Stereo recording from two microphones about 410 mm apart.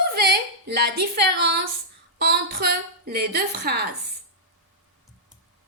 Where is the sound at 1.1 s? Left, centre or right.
Right.